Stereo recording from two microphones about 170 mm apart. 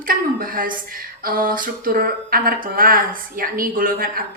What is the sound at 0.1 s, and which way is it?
Speech, 55° right (ahead or behind).